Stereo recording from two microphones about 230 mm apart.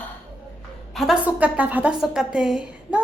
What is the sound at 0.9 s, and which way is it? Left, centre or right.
A woman's voice, centre.